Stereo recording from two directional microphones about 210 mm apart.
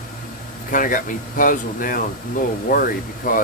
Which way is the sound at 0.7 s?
40° left (ahead or behind).